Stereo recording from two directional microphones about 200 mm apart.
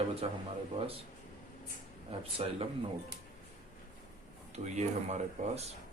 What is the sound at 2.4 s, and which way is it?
Speech, 30° right (ahead or behind).